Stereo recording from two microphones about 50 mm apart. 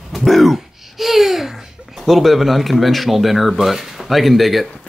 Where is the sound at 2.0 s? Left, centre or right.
Centre.